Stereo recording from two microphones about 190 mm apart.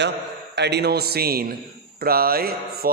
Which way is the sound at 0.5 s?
60° right (ahead or behind).